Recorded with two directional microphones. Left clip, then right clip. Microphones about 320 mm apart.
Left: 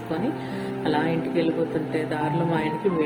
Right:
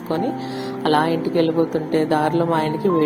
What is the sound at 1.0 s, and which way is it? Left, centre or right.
Speech, right.